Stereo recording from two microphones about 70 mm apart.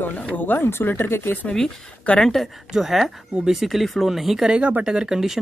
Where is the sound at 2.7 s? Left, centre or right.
Centre.